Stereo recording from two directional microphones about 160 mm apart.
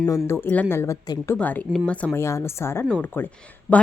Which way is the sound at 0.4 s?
10° left (ahead or behind).